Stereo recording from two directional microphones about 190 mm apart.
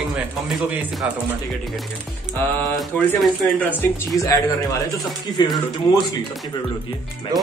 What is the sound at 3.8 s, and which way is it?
Speech, 20° left (ahead or behind).